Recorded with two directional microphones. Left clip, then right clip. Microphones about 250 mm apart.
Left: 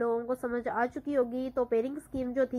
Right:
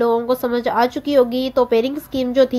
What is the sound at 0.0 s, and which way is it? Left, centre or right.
A woman's voice, right.